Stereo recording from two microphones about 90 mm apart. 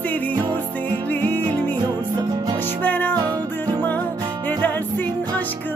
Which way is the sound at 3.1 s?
45° right (ahead or behind).